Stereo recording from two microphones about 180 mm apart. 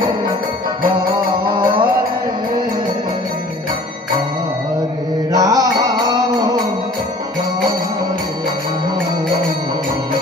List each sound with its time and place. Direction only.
1.5 s music: 25° right (ahead or behind)
5.3 s mantra: 20° right (ahead or behind)